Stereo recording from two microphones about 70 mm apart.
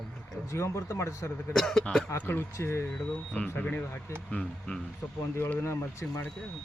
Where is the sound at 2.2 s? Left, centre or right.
Left.